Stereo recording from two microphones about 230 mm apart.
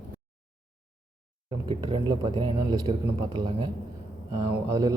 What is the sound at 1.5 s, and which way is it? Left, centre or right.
Speech, right.